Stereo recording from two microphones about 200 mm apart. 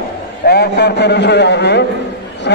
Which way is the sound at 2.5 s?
60° left (ahead or behind).